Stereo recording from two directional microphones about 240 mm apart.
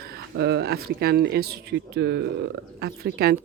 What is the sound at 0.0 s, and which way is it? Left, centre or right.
Speech, right.